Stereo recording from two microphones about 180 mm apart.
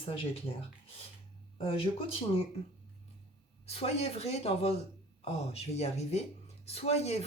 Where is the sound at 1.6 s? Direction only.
30° left (ahead or behind).